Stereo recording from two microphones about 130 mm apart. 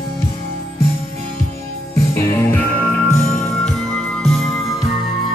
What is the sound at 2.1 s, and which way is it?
Music, 15° left (ahead or behind).